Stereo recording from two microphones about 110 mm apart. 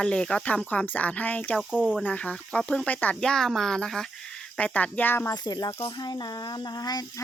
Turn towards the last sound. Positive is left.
turn(degrees=35)  # may be behind; listen again after turning